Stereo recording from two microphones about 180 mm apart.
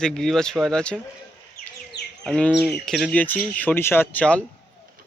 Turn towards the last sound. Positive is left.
turn(degrees=10)  # may be behind; listen again after turning